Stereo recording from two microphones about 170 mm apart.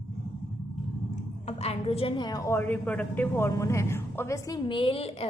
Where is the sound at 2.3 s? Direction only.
20° left (ahead or behind).